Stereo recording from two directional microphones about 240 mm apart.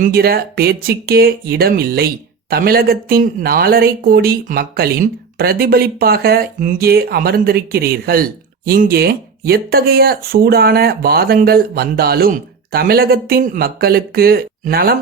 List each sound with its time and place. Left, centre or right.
0.0 s speech: right